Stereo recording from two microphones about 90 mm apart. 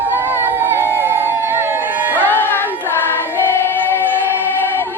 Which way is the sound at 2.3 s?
20° left (ahead or behind).